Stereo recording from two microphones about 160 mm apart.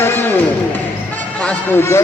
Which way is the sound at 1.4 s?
15° left (ahead or behind).